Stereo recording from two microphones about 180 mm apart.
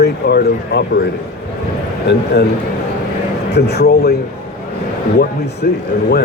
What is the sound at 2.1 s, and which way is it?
Speech, 70° left (ahead or behind).